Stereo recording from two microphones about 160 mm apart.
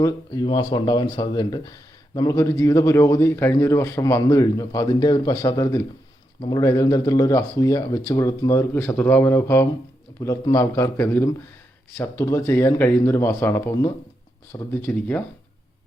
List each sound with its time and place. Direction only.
0.0 s speech: 25° left (ahead or behind)
14.8 s speech: 10° left (ahead or behind)